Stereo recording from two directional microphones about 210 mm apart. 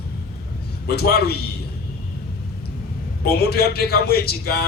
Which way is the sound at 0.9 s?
50° left (ahead or behind).